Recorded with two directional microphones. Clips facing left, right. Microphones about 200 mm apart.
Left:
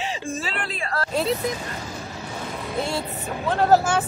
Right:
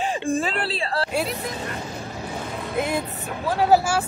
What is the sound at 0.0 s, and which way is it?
Speech, 50° right (ahead or behind).